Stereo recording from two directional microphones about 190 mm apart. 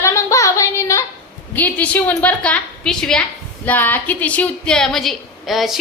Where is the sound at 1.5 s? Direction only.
10° left (ahead or behind).